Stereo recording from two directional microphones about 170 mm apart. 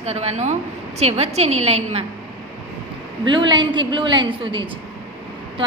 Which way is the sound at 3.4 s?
30° right (ahead or behind).